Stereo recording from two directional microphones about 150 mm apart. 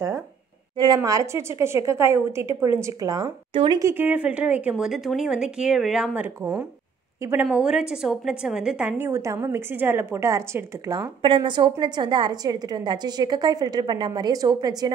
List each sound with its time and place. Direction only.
0.7 s a woman's voice: 25° right (ahead or behind)
3.8 s a woman's voice: 15° right (ahead or behind)
7.4 s a woman's voice: 5° right (ahead or behind); by 11.1 s 20° right (ahead or behind)
11.2 s a woman's voice: 30° right (ahead or behind)